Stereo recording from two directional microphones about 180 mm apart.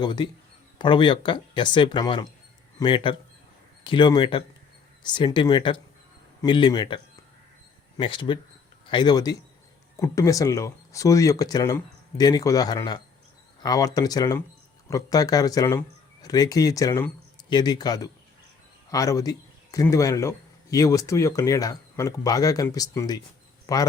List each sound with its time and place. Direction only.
0.0 s a man's voice: 25° left (ahead or behind)